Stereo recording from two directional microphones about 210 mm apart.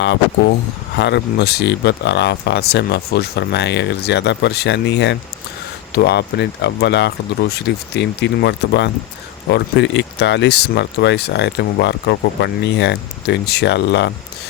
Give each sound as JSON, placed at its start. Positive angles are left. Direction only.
{"t": 0.9, "sound": "speech", "side_deg": 55}